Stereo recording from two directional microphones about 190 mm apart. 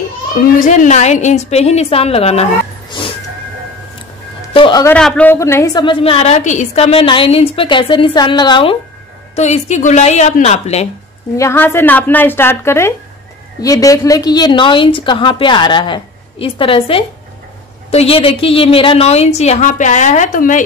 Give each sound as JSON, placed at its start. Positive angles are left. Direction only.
{"t": 0.6, "sound": "a woman's voice", "side_deg": 40}
{"t": 4.6, "sound": "a woman's voice", "side_deg": 25}
{"t": 4.8, "sound": "a woman's voice", "side_deg": 5}
{"t": 9.3, "sound": "a woman's voice", "side_deg": 35}
{"t": 11.3, "sound": "a woman's voice", "side_deg": 15}